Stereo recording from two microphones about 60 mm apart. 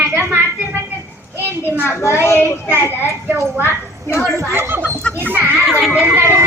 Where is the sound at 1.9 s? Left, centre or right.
Left.